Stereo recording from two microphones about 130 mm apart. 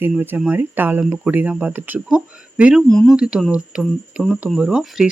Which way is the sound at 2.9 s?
5° left (ahead or behind).